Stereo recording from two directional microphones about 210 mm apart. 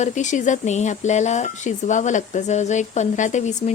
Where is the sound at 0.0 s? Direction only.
35° left (ahead or behind).